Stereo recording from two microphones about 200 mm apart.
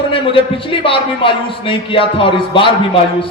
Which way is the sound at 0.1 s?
25° left (ahead or behind).